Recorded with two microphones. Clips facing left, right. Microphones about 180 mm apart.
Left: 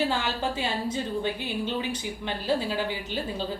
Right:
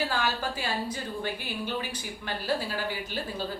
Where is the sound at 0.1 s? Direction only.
25° left (ahead or behind).